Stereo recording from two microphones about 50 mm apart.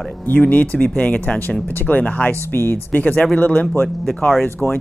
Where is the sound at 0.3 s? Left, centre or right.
Left.